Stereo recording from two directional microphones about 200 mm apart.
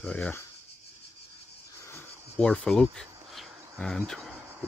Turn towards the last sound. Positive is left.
turn(degrees=0)  # may be behind; listen again after turning